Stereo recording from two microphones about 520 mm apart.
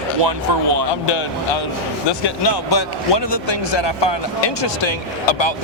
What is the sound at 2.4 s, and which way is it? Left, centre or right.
Speech, left.